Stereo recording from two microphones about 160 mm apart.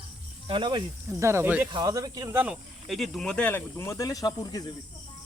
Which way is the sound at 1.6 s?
25° right (ahead or behind).